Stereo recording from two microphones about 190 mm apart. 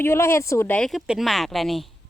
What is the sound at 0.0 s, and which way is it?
A woman's voice, 15° left (ahead or behind).